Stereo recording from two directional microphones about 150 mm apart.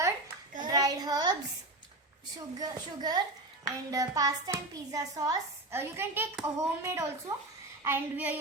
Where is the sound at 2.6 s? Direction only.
25° right (ahead or behind).